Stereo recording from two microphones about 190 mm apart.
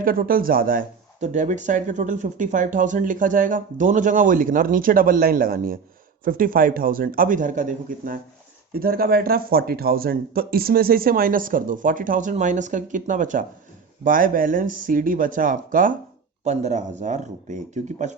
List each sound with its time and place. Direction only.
0.0 s speech: 50° right (ahead or behind)